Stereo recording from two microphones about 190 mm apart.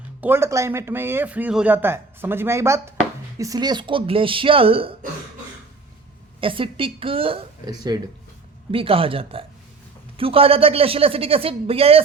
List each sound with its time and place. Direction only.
0.2 s speech: 10° right (ahead or behind); by 4.9 s 30° right (ahead or behind)
6.4 s speech: 30° right (ahead or behind)